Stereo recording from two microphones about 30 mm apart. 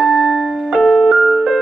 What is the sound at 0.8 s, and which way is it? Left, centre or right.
Keyboard, centre.